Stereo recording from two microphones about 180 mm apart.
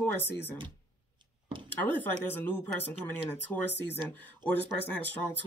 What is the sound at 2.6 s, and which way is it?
Speech, 10° left (ahead or behind).